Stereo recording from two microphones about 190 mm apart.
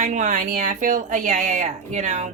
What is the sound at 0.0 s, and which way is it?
A woman's voice, 40° right (ahead or behind).